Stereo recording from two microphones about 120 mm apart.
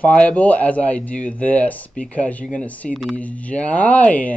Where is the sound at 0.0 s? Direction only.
10° left (ahead or behind).